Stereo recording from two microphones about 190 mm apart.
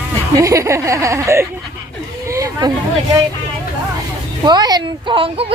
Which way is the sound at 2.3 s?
20° right (ahead or behind).